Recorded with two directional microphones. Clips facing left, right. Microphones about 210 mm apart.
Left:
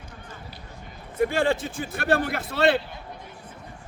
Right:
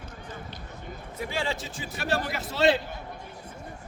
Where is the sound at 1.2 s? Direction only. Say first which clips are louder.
Left 9 dB; 55° left (ahead or behind).